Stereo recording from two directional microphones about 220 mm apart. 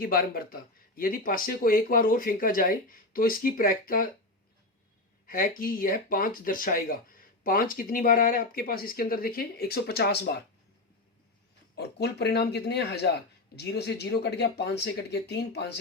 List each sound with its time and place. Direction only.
0.0 s speech: 40° left (ahead or behind)
5.2 s speech: 40° left (ahead or behind)
11.8 s speech: 50° left (ahead or behind)